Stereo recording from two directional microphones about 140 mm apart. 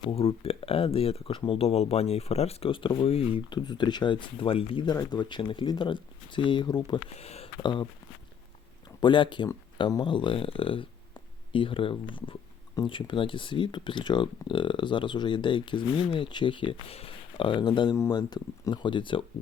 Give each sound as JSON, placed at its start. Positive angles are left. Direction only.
{"t": 0.0, "sound": "speech", "side_deg": 40}
{"t": 7.1, "sound": "speech", "side_deg": 50}
{"t": 7.6, "sound": "speech", "side_deg": 35}
{"t": 9.0, "sound": "speech", "side_deg": 35}